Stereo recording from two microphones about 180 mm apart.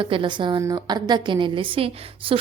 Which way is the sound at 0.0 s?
30° right (ahead or behind).